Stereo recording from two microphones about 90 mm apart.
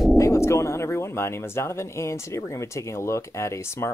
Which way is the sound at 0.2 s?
35° left (ahead or behind).